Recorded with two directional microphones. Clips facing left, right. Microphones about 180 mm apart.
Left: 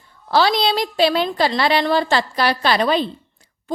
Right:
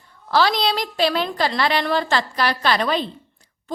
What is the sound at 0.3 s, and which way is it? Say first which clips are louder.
A woman's voice: left 2 dB; 30° left (ahead or behind).